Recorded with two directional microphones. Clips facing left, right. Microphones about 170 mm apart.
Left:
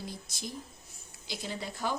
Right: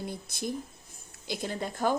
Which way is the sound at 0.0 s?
55° right (ahead or behind).